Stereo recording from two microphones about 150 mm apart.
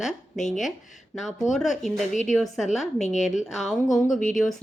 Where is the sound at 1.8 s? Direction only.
Centre (ahead or behind).